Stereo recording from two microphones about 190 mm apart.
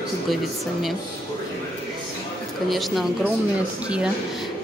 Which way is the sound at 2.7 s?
Centre (ahead or behind).